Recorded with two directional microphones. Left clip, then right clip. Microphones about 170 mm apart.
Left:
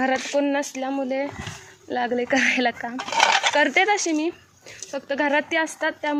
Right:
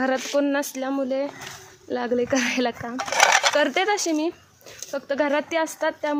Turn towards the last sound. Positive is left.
turn(degrees=-20)  # may be behind; listen again after turning